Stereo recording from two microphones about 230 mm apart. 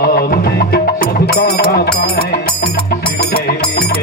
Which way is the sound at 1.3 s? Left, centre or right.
Left.